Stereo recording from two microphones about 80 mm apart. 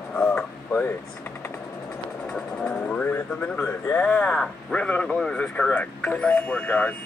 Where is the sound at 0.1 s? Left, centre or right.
Centre.